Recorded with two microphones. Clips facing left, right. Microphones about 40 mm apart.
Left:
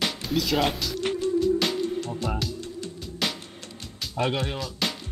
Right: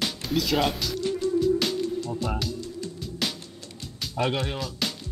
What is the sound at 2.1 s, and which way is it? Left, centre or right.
Speech, centre.